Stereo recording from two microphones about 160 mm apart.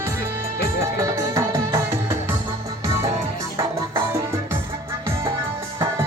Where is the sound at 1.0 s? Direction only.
20° right (ahead or behind).